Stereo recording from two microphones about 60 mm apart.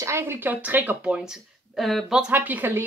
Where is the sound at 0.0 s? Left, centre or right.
Right.